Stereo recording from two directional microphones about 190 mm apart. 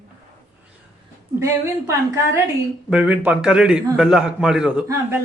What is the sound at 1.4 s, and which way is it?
A man's voice, 15° right (ahead or behind).